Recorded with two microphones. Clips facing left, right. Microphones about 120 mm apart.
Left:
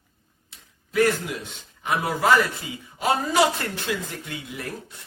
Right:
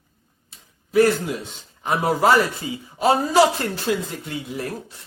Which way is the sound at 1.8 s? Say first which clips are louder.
Right 4 dB; 25° right (ahead or behind).